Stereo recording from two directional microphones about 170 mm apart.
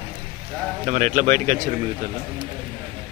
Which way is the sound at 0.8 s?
45° right (ahead or behind).